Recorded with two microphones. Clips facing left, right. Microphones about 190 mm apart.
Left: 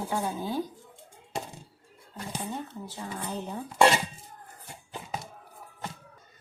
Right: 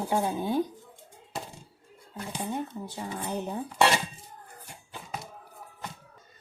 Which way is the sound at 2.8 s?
15° right (ahead or behind).